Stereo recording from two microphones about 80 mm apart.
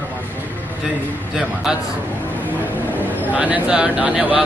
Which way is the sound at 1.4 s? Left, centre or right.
Centre.